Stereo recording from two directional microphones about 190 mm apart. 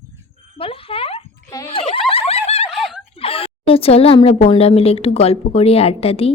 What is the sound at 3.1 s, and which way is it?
A woman's voice, 30° left (ahead or behind).